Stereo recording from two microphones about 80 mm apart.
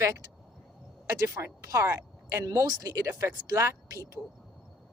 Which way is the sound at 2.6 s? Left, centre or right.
Right.